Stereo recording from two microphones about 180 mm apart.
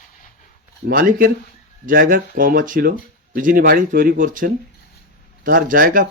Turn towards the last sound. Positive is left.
turn(degrees=-50)  # may be behind; listen again after turning